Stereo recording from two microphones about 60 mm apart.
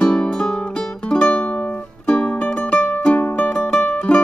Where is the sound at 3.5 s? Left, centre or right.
Centre.